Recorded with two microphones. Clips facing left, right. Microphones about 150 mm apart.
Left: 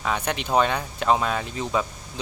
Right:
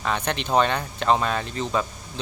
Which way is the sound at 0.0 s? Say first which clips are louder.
Even; 5° left (ahead or behind).